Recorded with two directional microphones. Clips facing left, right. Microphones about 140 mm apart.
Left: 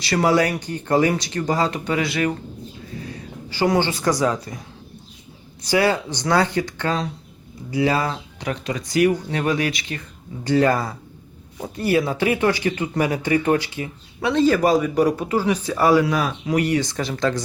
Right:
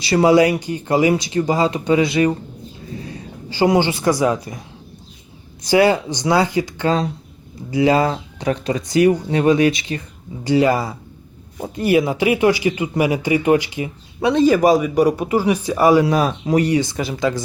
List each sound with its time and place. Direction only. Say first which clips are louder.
0.0 s speech: right 5 dB; 15° right (ahead or behind)
3.5 s speech: right 4 dB; 20° right (ahead or behind)
5.6 s speech: right 5 dB; 20° right (ahead or behind)
6.8 s speech: right 7 dB; 30° right (ahead or behind)
7.7 s speech: right 5 dB; 20° right (ahead or behind)
10.4 s speech: right 2 dB; 10° right (ahead or behind)
16.0 s speech: right 4 dB; 30° right (ahead or behind)
16.8 s speech: right 2 dB; 10° right (ahead or behind)